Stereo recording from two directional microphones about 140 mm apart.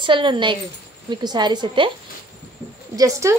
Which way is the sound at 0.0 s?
35° right (ahead or behind).